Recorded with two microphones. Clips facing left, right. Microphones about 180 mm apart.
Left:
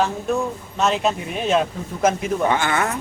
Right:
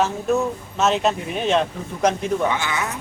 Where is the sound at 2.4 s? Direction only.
50° left (ahead or behind).